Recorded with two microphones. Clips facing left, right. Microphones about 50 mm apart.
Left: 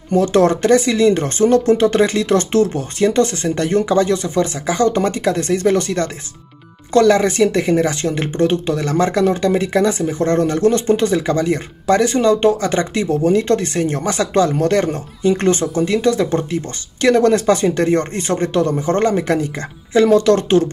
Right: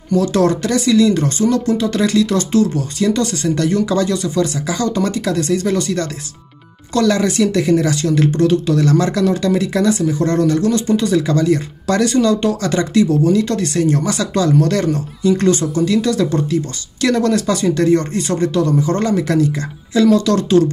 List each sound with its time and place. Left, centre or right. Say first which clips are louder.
0.1 s speech: left 1 dB; left